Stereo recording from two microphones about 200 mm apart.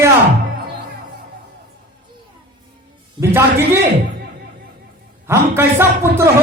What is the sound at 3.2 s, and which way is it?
Speech, 10° right (ahead or behind).